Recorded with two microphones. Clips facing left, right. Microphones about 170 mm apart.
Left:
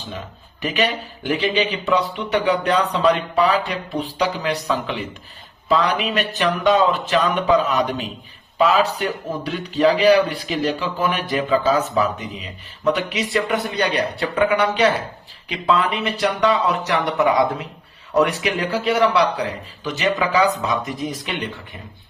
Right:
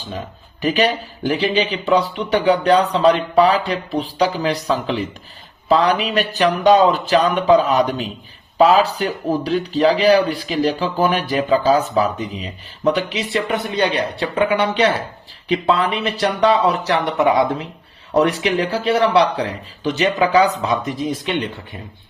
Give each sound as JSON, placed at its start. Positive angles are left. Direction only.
{"t": 0.6, "sound": "speech", "side_deg": -35}